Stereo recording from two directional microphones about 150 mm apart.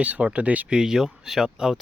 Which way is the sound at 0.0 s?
10° right (ahead or behind).